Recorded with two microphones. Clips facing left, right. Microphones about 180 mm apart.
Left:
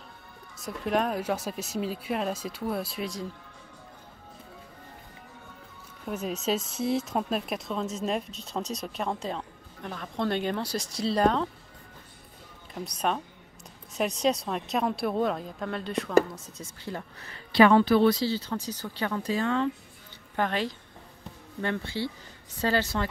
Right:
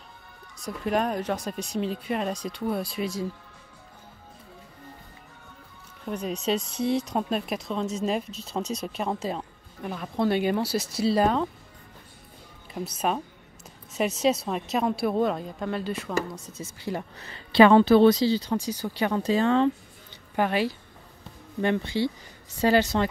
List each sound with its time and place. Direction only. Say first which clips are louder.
0.6 s speech: right 1 dB; centre (ahead or behind)
6.0 s speech: right 2 dB; 5° left (ahead or behind)
12.7 s speech: right 2 dB; 5° right (ahead or behind)
17.3 s speech: right 3 dB; 25° right (ahead or behind)
19.1 s speech: right 5 dB; 25° right (ahead or behind)
20.3 s speech: right 4 dB; 10° right (ahead or behind)